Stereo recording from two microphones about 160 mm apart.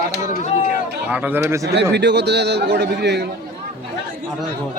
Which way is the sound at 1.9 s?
90° right.